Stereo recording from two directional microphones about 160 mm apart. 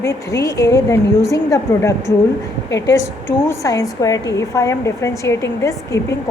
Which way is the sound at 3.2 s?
20° left (ahead or behind).